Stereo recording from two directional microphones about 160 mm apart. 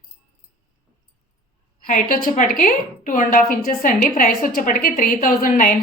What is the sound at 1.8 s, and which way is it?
A woman's voice, 60° left (ahead or behind).